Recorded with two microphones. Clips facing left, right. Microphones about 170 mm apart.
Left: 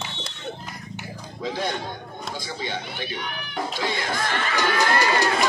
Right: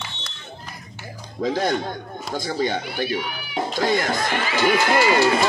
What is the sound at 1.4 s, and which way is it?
A man's voice, 45° right (ahead or behind).